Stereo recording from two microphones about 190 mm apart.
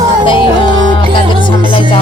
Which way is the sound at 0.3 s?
25° left (ahead or behind).